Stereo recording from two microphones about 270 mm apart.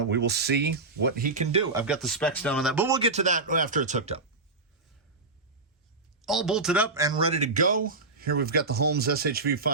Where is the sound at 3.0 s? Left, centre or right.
Right.